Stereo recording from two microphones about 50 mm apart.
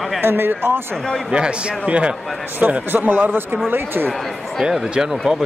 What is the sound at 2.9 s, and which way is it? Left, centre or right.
Speech, right.